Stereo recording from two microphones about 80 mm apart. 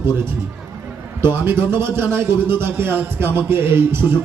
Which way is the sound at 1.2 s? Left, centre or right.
Right.